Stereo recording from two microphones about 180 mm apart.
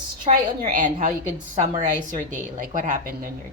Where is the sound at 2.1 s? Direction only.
45° right (ahead or behind).